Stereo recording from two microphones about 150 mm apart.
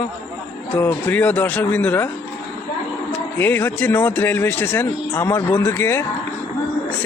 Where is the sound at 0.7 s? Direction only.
15° left (ahead or behind).